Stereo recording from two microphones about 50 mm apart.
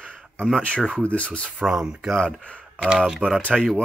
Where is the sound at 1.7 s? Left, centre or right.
Centre.